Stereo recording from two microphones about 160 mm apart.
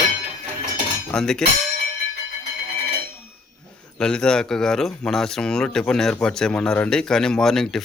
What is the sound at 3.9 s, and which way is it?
Speech, 5° left (ahead or behind).